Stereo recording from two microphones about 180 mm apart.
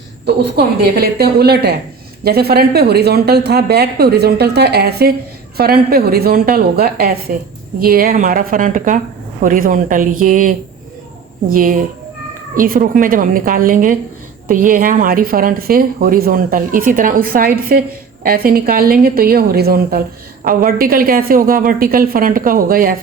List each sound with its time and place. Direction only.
0.3 s a woman's voice: 65° right (ahead or behind)